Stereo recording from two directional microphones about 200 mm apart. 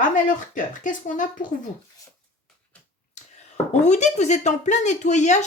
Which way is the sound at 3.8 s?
35° left (ahead or behind).